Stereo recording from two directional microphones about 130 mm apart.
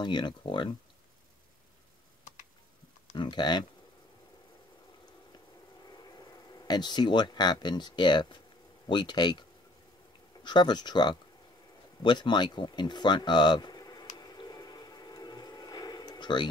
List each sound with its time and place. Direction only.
0.0 s speech: 35° left (ahead or behind)
3.2 s speech: 35° left (ahead or behind)
5.9 s speech: 30° left (ahead or behind)
10.4 s speech: 35° left (ahead or behind)
14.1 s squish: 30° left (ahead or behind)